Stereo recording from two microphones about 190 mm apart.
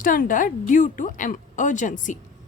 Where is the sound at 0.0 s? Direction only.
45° left (ahead or behind).